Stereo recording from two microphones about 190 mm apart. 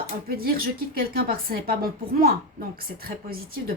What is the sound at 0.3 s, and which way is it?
A woman's voice, 50° right (ahead or behind).